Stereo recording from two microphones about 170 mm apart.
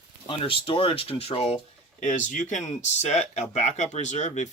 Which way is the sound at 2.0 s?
45° left (ahead or behind).